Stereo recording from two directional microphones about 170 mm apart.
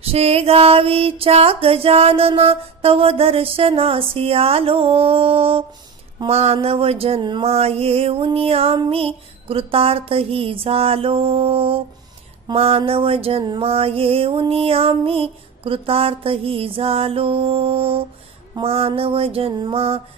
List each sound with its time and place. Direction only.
0.0 s mantra: 35° right (ahead or behind)